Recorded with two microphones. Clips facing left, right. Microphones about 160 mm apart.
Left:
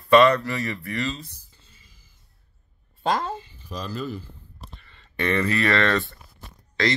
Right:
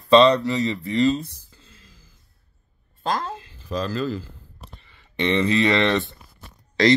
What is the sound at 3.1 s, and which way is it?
Speech, 5° left (ahead or behind).